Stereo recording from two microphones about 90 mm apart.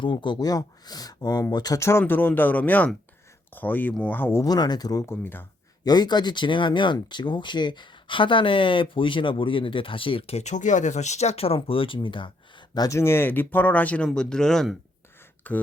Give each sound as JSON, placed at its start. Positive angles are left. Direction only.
{"t": 0.0, "sound": "speech", "side_deg": 60}
{"t": 0.3, "sound": "speech", "side_deg": 45}
{"t": 1.8, "sound": "speech", "side_deg": 30}
{"t": 4.4, "sound": "speech", "side_deg": 50}
{"t": 5.0, "sound": "speech", "side_deg": 25}
{"t": 5.8, "sound": "speech", "side_deg": 50}
{"t": 11.3, "sound": "speech", "side_deg": 90}
{"t": 12.9, "sound": "speech", "side_deg": 30}
{"t": 15.5, "sound": "speech", "side_deg": 15}